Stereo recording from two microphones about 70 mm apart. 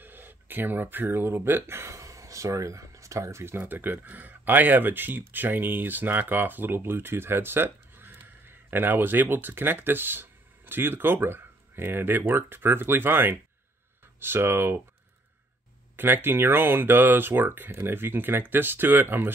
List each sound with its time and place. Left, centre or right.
0.0 s speech: right
3.5 s speech: right
16.0 s speech: right